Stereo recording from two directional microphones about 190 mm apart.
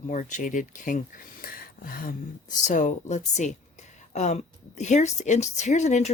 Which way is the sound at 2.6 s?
40° left (ahead or behind).